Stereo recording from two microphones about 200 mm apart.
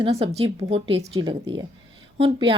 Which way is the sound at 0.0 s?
30° right (ahead or behind).